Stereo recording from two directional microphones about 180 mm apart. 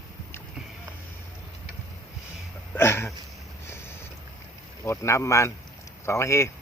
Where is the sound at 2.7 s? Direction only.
15° left (ahead or behind).